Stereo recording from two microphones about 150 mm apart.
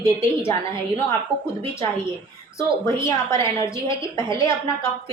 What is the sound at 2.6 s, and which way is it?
A woman's voice, 20° left (ahead or behind).